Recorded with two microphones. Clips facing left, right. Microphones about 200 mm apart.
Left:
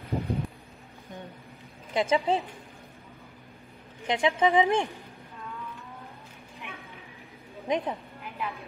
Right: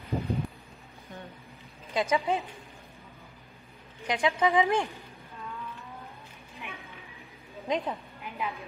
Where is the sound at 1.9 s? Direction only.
20° left (ahead or behind).